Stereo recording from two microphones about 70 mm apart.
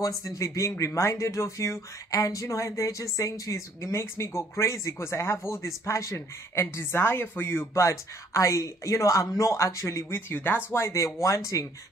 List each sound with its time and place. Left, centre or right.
0.0 s speech: left